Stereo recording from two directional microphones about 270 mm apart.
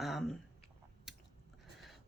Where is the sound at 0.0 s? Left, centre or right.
Centre.